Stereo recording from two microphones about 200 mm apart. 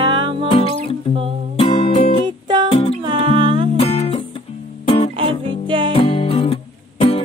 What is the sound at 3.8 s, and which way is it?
Music, 30° left (ahead or behind).